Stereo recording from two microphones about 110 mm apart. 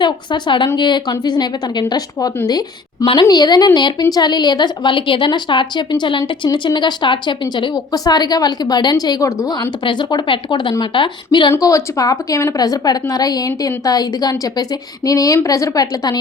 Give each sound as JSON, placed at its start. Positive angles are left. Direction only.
{"t": 0.0, "sound": "a woman's voice", "side_deg": 45}
{"t": 11.5, "sound": "a woman's voice", "side_deg": 30}